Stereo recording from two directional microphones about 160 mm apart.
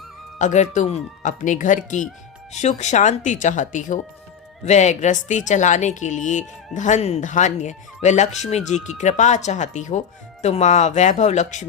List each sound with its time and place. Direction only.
0.3 s speech: 50° left (ahead or behind)